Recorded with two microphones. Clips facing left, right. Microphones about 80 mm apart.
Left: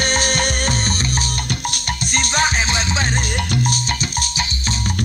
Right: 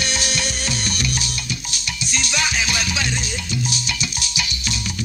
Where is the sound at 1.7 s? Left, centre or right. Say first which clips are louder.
Left 5 dB; left.